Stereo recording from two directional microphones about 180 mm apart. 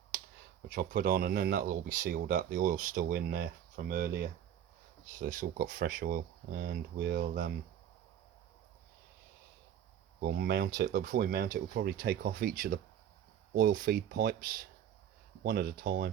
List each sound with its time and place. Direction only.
0.7 s speech: 50° right (ahead or behind)
5.1 s speech: 50° right (ahead or behind)
10.2 s speech: 55° right (ahead or behind)
11.0 s speech: 50° right (ahead or behind)